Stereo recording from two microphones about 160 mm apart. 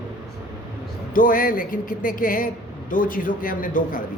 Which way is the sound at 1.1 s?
60° left (ahead or behind).